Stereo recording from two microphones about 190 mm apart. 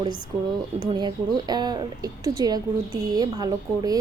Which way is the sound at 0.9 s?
20° right (ahead or behind).